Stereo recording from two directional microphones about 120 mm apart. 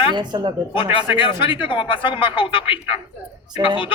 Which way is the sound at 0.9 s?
45° left (ahead or behind).